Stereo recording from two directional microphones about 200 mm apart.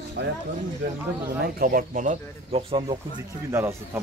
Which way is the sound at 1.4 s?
45° right (ahead or behind).